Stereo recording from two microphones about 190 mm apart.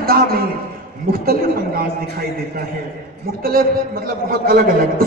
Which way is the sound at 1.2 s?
50° right (ahead or behind).